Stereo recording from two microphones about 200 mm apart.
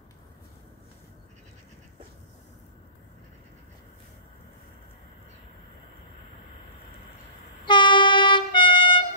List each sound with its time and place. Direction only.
7.6 s train: 25° left (ahead or behind)